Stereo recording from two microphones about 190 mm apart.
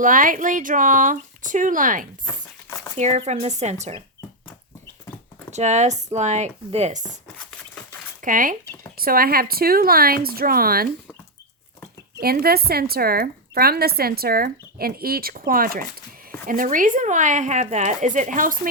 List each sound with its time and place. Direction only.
0.0 s speech: 45° right (ahead or behind)
2.2 s crumpling: 15° left (ahead or behind)
3.0 s speech: 35° right (ahead or behind)
5.5 s speech: 35° right (ahead or behind)
8.2 s speech: 45° right (ahead or behind)
12.2 s speech: 55° right (ahead or behind)